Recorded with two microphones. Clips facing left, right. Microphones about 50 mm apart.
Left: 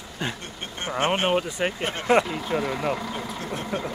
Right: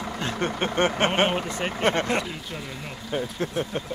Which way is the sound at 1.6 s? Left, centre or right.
Centre.